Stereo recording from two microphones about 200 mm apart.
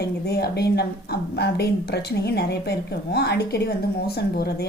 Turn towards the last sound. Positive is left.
turn(degrees=50)  # may be behind; listen again after turning